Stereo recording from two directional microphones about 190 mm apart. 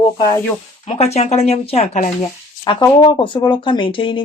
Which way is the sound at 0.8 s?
35° left (ahead or behind).